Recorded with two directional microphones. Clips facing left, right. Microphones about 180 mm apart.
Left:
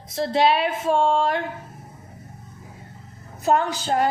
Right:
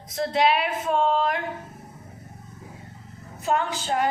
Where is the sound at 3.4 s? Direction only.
40° left (ahead or behind).